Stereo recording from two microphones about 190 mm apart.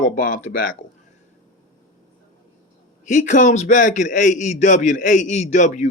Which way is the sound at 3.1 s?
40° left (ahead or behind).